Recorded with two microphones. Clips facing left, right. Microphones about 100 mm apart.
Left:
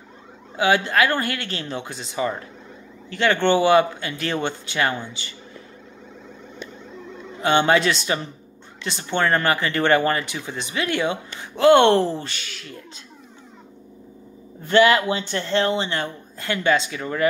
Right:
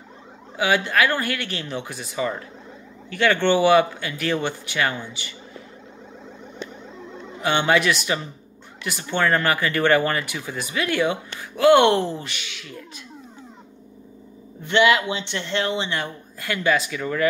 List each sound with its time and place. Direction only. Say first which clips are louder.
0.6 s speech: left 1 dB; 25° left (ahead or behind)
7.3 s speech: left 2 dB; 30° left (ahead or behind)
14.7 s speech: left 2 dB; 35° left (ahead or behind)